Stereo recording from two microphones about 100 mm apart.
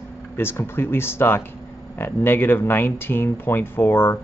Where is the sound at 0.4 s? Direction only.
25° left (ahead or behind).